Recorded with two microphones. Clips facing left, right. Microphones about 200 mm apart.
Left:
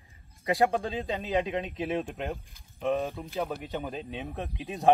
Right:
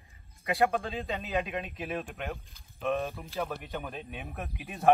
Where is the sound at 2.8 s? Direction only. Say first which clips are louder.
Left 2 dB; 15° left (ahead or behind).